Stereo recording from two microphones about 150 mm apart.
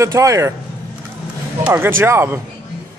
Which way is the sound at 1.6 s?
15° right (ahead or behind).